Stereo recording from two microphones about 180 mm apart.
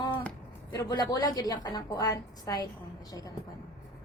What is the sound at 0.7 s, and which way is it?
Speech, 20° left (ahead or behind).